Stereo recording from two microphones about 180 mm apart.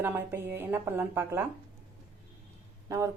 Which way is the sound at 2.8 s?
15° right (ahead or behind).